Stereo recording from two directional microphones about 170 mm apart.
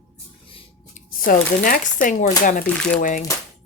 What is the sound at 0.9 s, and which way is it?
Speech, 55° left (ahead or behind).